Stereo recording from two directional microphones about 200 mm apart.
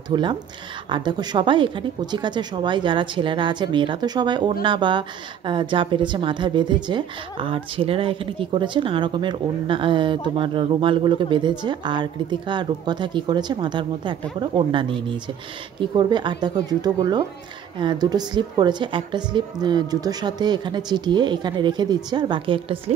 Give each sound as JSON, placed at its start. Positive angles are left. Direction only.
{"t": 0.1, "sound": "speech", "side_deg": -20}